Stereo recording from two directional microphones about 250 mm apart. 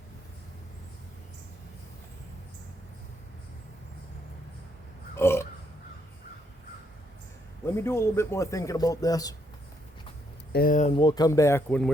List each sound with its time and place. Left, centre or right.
5.1 s burping: centre
7.8 s speech: centre
10.5 s speech: left; by 11.9 s centre